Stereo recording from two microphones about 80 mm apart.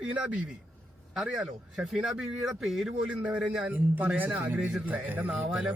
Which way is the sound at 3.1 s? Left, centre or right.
Centre.